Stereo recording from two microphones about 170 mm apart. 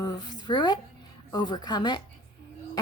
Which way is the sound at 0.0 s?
25° left (ahead or behind).